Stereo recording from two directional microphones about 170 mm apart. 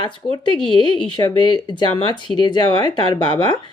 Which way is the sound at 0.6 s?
30° right (ahead or behind).